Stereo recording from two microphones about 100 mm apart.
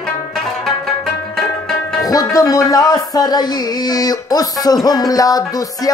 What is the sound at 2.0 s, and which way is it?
Music, 35° left (ahead or behind).